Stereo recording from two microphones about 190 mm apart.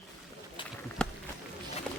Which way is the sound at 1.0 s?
5° left (ahead or behind).